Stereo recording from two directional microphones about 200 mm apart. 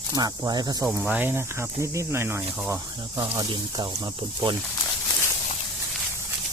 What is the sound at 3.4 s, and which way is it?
Speech, 20° right (ahead or behind).